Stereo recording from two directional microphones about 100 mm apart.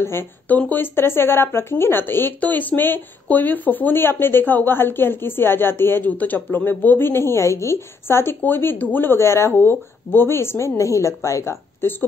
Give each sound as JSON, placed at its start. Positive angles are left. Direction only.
{"t": 0.0, "sound": "speech", "side_deg": 20}